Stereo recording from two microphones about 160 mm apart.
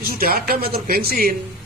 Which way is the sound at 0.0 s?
70° right (ahead or behind).